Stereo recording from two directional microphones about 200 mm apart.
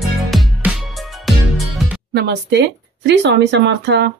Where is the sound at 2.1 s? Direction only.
55° right (ahead or behind).